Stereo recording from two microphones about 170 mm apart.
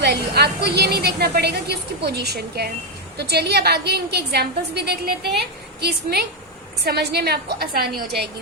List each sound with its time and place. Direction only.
0.0 s a woman's voice: 70° right (ahead or behind)